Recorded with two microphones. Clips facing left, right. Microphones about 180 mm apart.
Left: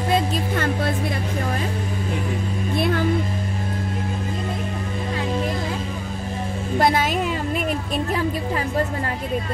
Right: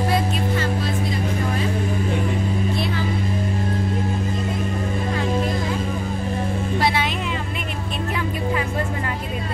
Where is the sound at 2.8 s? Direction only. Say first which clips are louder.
Left 3 dB; 50° left (ahead or behind).